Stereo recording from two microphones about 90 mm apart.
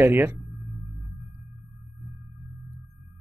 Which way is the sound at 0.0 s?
25° right (ahead or behind).